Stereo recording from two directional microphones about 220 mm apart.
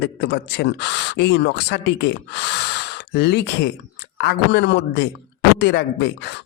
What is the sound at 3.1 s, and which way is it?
Speech, 50° left (ahead or behind).